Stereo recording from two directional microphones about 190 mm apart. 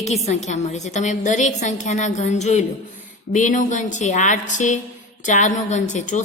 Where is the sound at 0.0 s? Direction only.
35° left (ahead or behind).